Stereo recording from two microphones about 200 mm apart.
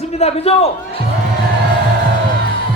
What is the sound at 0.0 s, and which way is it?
A man's voice, 30° left (ahead or behind).